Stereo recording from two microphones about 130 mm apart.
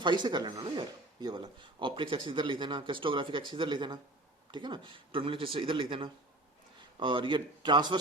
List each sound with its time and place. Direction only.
0.0 s speech: 35° right (ahead or behind)